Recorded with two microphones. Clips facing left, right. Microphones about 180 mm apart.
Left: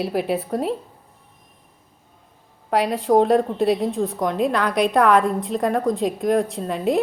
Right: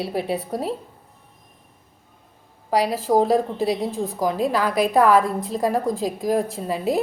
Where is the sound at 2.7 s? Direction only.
Centre (ahead or behind).